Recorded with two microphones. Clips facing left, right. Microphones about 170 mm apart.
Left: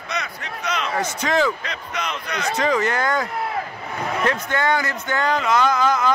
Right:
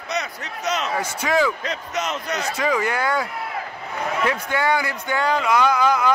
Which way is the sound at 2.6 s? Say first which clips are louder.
Left 2 dB; 10° right (ahead or behind).